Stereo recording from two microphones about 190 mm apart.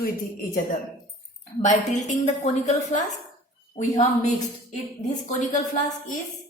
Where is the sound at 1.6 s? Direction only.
40° left (ahead or behind).